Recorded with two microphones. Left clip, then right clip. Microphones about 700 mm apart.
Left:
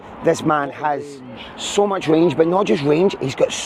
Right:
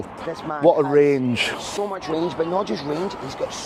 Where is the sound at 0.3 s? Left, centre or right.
Left.